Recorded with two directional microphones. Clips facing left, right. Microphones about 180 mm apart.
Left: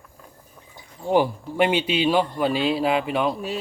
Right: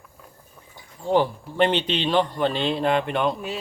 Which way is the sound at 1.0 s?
10° left (ahead or behind).